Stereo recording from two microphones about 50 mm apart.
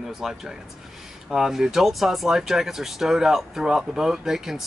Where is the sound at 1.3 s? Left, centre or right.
Centre.